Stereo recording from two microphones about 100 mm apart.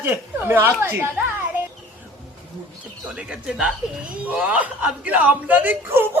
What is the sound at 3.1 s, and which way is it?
Speech, 10° right (ahead or behind).